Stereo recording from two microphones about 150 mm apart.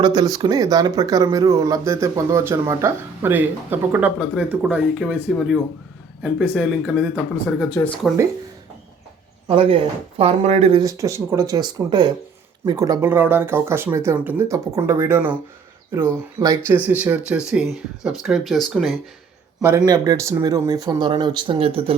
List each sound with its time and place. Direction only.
0.0 s speech: 25° right (ahead or behind); by 7.1 s 5° right (ahead or behind)
7.8 s speech: 20° left (ahead or behind)
9.5 s speech: 40° right (ahead or behind)
10.7 s speech: 25° right (ahead or behind); by 18.9 s centre (ahead or behind)
19.6 s speech: 25° right (ahead or behind); by 21.9 s 40° right (ahead or behind)